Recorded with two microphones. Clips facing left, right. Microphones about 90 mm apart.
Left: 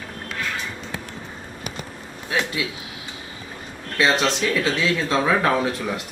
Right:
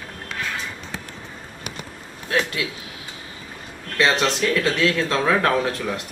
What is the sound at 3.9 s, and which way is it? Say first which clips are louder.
Speech: even; centre (ahead or behind).